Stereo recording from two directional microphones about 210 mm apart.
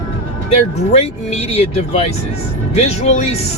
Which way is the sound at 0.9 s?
30° left (ahead or behind).